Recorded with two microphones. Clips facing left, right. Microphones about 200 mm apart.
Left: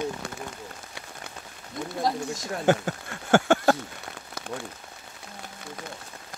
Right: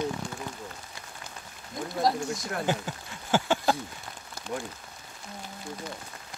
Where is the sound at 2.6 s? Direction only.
55° left (ahead or behind).